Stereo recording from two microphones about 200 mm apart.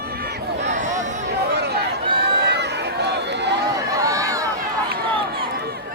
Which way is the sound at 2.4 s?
60° right (ahead or behind).